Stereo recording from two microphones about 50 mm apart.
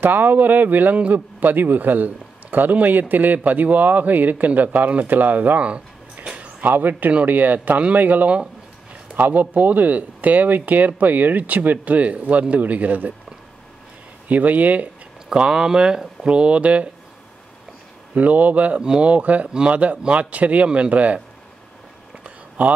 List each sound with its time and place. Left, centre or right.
0.0 s a man's voice: right
5.6 s a sound: right
6.6 s a man's voice: right
14.2 s a man's voice: right
15.2 s speech: centre
18.1 s a man's voice: right
18.8 s speech: centre
22.6 s a man's voice: right